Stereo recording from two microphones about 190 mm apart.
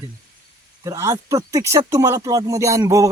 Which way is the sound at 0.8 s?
15° right (ahead or behind).